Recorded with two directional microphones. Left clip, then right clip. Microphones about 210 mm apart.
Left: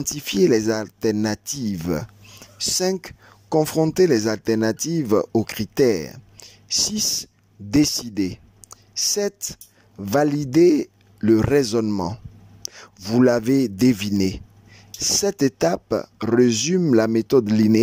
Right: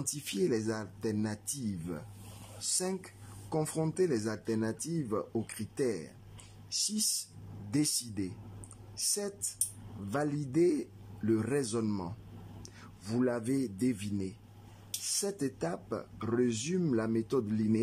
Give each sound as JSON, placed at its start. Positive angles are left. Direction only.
{"t": 0.0, "sound": "a man's voice", "side_deg": 35}